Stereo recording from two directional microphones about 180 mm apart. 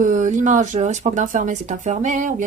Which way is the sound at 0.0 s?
45° right (ahead or behind).